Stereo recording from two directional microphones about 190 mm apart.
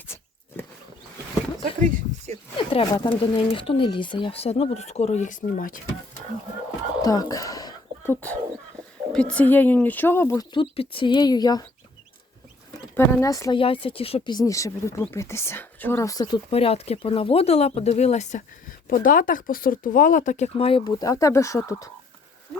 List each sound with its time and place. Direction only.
2.6 s speech: 25° left (ahead or behind); by 5.8 s 45° left (ahead or behind)
7.0 s a sound: 20° left (ahead or behind)
9.1 s speech: 5° left (ahead or behind)
13.0 s speech: 15° left (ahead or behind)
13.6 s speech: 30° left (ahead or behind)